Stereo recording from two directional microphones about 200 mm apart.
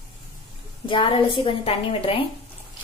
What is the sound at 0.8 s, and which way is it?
A woman's voice, 25° left (ahead or behind).